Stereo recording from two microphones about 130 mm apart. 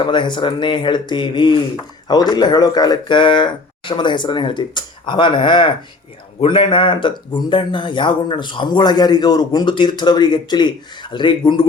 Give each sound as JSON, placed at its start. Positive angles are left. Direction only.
{"t": 0.0, "sound": "a man's voice", "side_deg": 40}